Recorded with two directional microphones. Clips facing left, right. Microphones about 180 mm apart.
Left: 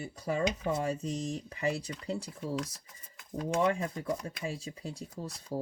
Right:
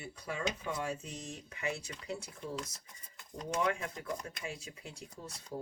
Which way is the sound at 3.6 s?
35° left (ahead or behind).